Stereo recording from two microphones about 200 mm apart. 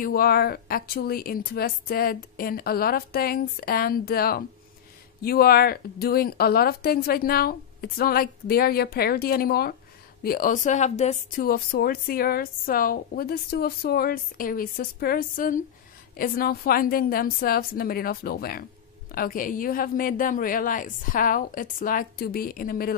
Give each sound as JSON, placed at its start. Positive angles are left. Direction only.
{"t": 0.0, "sound": "speech", "side_deg": 50}